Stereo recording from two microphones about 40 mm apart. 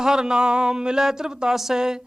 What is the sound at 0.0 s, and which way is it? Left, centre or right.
Speech, centre.